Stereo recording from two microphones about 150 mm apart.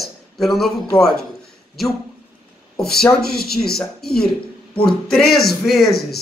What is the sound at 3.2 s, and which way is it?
Speech, 90° left.